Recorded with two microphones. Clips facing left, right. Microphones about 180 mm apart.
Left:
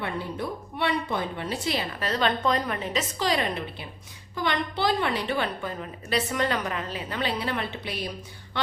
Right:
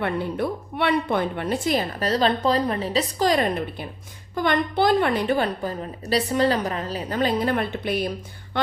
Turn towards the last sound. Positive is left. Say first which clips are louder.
# right 7 dB
turn(degrees=-50)  # may be behind; listen again after turning